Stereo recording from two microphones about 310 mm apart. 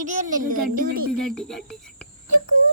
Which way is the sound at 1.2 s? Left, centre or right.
Centre.